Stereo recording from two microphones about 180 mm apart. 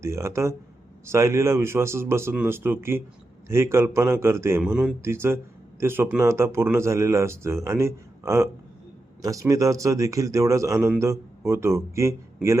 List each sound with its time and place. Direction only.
0.0 s a man's voice: 15° right (ahead or behind)